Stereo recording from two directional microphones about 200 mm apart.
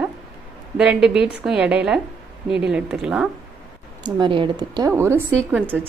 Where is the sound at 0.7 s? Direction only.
5° right (ahead or behind).